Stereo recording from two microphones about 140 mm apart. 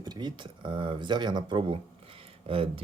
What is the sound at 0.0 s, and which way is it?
Speech, 30° right (ahead or behind).